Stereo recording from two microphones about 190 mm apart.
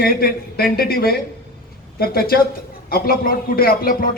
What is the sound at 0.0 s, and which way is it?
A man's voice, 55° left (ahead or behind).